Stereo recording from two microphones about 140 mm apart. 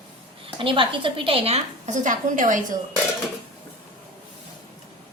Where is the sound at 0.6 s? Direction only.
35° right (ahead or behind).